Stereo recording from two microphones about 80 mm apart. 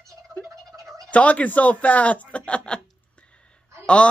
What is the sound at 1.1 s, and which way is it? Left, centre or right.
Speech, centre.